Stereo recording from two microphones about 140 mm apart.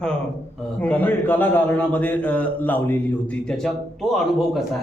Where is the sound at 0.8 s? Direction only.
10° left (ahead or behind).